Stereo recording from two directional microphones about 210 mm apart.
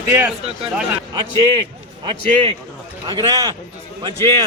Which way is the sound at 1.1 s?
20° right (ahead or behind).